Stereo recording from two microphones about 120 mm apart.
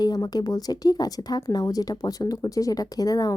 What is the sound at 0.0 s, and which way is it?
Speech, 35° left (ahead or behind).